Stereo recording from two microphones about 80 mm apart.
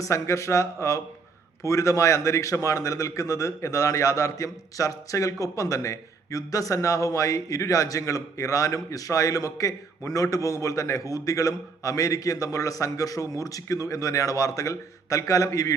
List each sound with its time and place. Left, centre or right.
0.0 s a man's voice: left